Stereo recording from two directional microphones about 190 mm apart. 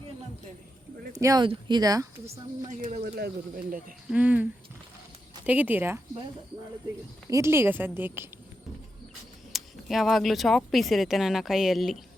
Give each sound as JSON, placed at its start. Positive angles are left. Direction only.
{"t": 1.1, "sound": "speech", "side_deg": -15}
{"t": 2.6, "sound": "speech", "side_deg": -35}
{"t": 3.2, "sound": "speech", "side_deg": -55}
{"t": 4.1, "sound": "a woman's voice", "side_deg": -5}
{"t": 5.5, "sound": "a woman's voice", "side_deg": -10}
{"t": 7.3, "sound": "a woman's voice", "side_deg": -15}
{"t": 9.5, "sound": "speech", "side_deg": 0}